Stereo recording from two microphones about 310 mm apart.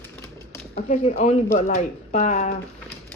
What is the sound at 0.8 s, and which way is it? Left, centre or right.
Speech, left.